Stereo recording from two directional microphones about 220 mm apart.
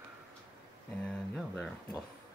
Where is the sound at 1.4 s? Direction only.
5° left (ahead or behind).